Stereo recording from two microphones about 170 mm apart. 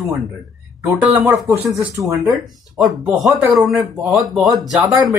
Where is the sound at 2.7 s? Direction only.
Centre (ahead or behind).